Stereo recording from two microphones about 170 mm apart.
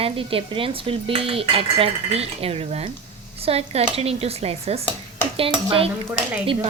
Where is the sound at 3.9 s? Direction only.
35° right (ahead or behind).